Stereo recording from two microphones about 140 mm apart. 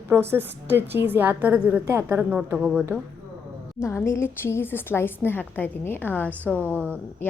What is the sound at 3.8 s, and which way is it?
A woman's voice, 20° left (ahead or behind).